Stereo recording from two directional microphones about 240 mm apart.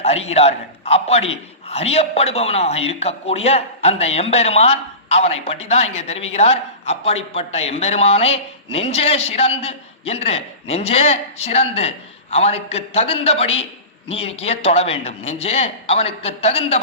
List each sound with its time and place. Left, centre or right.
0.0 s a man's voice: left